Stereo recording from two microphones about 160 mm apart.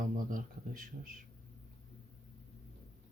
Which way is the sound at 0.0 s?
60° right (ahead or behind).